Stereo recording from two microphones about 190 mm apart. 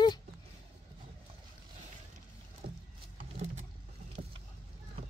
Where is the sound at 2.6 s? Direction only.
55° right (ahead or behind).